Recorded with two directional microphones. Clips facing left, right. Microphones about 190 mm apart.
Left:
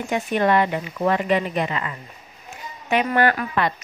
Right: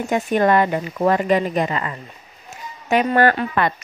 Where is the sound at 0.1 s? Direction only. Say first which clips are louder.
Right 3 dB; 45° right (ahead or behind).